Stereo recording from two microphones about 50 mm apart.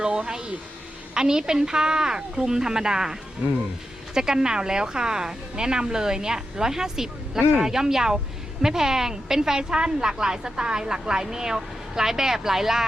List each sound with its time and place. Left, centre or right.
0.0 s a woman's voice: centre